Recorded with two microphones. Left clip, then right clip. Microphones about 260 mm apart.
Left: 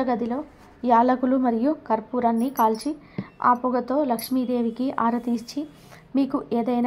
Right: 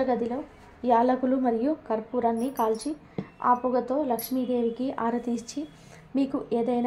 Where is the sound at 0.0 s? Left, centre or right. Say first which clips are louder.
Left 1 dB; left.